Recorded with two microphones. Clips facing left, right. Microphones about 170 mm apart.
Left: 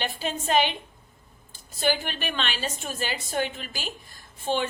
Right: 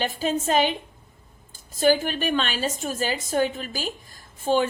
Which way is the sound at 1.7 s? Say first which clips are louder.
Right 6 dB; 45° right (ahead or behind).